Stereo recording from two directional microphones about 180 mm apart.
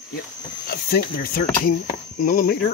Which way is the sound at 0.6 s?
55° left (ahead or behind).